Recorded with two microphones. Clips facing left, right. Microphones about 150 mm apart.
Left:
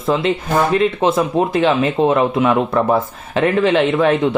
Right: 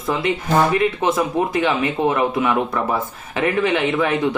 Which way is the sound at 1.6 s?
25° left (ahead or behind).